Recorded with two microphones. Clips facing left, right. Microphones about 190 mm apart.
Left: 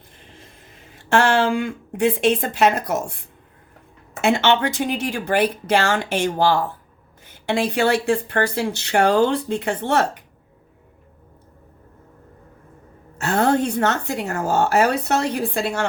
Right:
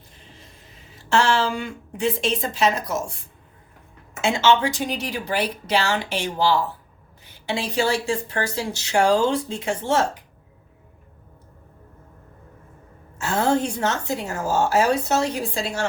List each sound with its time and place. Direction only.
1.1 s speech: 55° left (ahead or behind)
4.2 s speech: 60° left (ahead or behind)
13.1 s speech: 60° left (ahead or behind)